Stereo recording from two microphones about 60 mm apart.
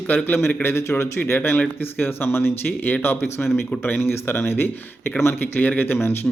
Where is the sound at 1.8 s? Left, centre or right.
Left.